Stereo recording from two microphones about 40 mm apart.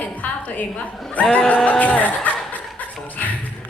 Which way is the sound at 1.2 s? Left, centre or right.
Left.